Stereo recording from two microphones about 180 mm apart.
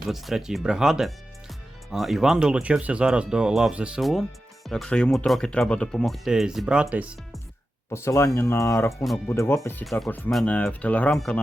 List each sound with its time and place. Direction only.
0.1 s speech: centre (ahead or behind)
7.9 s speech: 15° left (ahead or behind)